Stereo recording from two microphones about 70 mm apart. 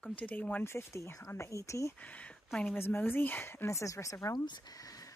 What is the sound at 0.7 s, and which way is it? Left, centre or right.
Speech, left.